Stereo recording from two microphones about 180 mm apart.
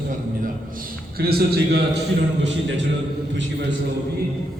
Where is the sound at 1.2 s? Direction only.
60° right (ahead or behind).